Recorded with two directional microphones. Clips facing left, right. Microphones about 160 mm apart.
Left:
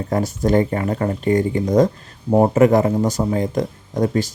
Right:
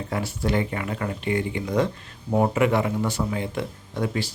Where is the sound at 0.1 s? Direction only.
40° left (ahead or behind).